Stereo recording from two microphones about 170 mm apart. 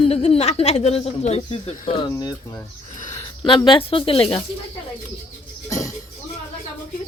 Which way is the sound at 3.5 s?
30° left (ahead or behind).